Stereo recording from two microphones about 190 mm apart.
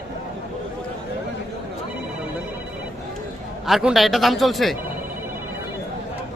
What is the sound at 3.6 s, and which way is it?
Speech, centre (ahead or behind).